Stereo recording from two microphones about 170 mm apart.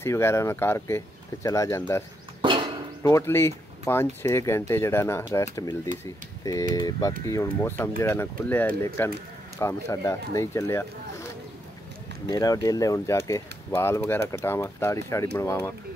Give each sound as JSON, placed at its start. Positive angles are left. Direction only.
{"t": 0.0, "sound": "speech", "side_deg": 15}
{"t": 2.4, "sound": "a sound", "side_deg": -30}
{"t": 3.0, "sound": "speech", "side_deg": 15}
{"t": 12.3, "sound": "speech", "side_deg": 20}